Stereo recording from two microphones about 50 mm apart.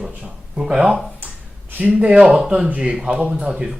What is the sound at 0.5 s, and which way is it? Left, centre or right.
Speech, centre.